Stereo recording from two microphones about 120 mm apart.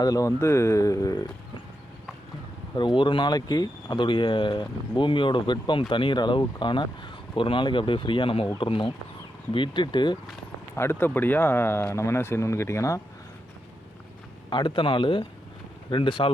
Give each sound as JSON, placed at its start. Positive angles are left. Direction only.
{"t": 0.0, "sound": "speech", "side_deg": 30}
{"t": 2.7, "sound": "speech", "side_deg": 40}
{"t": 10.8, "sound": "speech", "side_deg": 20}
{"t": 14.5, "sound": "speech", "side_deg": 40}